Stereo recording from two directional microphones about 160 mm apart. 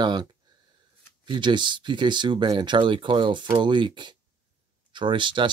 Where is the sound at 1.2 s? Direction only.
30° right (ahead or behind).